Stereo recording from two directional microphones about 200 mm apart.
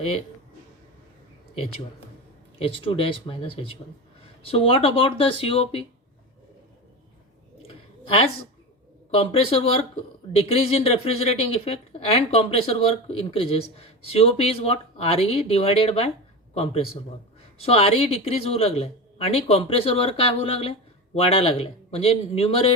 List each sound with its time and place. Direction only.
2.8 s speech: 25° left (ahead or behind)
9.0 s speech: 30° left (ahead or behind)